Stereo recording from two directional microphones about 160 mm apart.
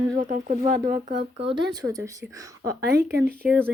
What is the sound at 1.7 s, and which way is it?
Speech, 20° right (ahead or behind).